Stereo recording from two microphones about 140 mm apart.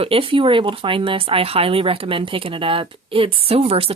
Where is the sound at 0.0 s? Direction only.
40° right (ahead or behind).